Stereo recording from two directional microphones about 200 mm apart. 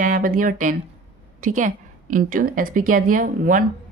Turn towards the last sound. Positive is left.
turn(degrees=-40)  # may be behind; listen again after turning